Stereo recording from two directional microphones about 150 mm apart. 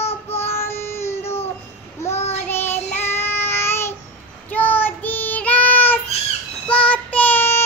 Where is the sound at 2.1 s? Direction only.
45° left (ahead or behind).